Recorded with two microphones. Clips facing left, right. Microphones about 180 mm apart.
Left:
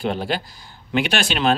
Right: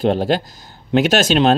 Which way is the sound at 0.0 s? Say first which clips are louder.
Right 7 dB; 40° right (ahead or behind).